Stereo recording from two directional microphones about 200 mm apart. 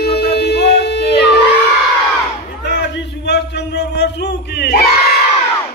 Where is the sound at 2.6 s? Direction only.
60° left (ahead or behind).